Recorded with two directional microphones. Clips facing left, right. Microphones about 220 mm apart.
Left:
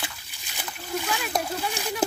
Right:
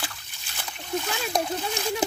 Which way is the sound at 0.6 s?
5° left (ahead or behind).